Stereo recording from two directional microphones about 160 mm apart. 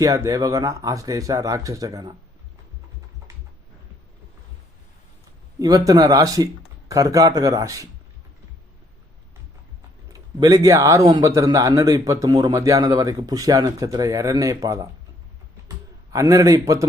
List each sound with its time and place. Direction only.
0.0 s a man's voice: 20° right (ahead or behind)
5.5 s a man's voice: 20° right (ahead or behind)
10.1 s a man's voice: 20° right (ahead or behind)
16.1 s a man's voice: 20° right (ahead or behind)